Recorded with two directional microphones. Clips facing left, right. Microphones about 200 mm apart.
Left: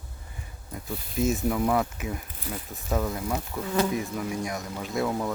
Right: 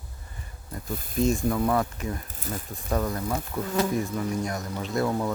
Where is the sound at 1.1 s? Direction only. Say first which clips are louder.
Right 1 dB; 5° left (ahead or behind).